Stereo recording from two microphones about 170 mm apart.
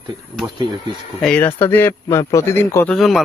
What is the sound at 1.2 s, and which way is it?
A man's voice, 5° left (ahead or behind).